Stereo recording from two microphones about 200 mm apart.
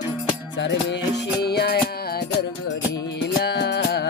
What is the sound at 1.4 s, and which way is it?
Music, 55° left (ahead or behind).